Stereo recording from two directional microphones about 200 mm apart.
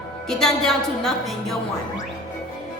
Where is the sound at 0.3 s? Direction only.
Centre (ahead or behind).